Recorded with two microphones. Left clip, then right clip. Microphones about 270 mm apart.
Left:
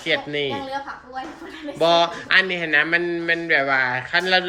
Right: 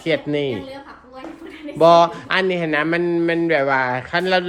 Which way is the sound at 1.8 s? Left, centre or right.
Centre.